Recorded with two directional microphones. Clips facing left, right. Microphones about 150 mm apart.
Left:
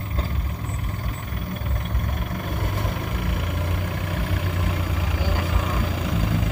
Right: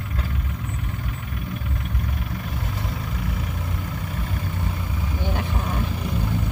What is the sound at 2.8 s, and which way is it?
Vehicle, 65° left (ahead or behind).